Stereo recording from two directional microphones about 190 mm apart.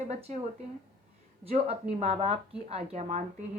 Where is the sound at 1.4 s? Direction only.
35° right (ahead or behind).